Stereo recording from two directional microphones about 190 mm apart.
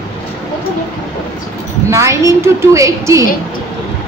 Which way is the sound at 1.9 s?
15° right (ahead or behind).